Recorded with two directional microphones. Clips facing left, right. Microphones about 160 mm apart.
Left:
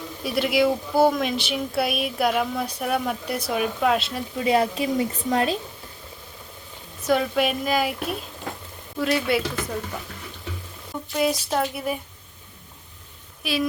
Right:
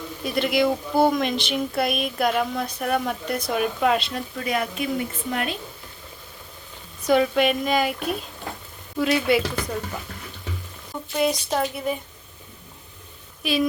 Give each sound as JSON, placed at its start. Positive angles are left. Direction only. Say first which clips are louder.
{"t": 0.3, "sound": "speech", "louder": "even", "side_deg": 5}
{"t": 4.4, "sound": "speech", "louder": "left 6 dB", "side_deg": 30}
{"t": 7.1, "sound": "speech", "louder": "right 2 dB", "side_deg": 0}
{"t": 11.1, "sound": "speech", "louder": "even", "side_deg": 0}
{"t": 13.4, "sound": "speech", "louder": "right 3 dB", "side_deg": 0}